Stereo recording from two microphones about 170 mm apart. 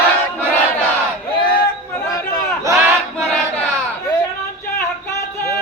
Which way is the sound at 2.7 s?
5° left (ahead or behind).